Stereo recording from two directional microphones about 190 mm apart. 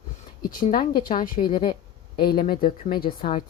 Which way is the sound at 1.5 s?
25° left (ahead or behind).